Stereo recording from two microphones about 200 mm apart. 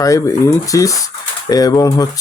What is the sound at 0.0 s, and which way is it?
Speech, 15° left (ahead or behind).